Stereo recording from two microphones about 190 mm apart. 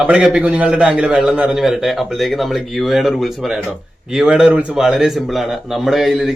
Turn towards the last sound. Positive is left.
turn(degrees=0)  # may be behind; listen again after turning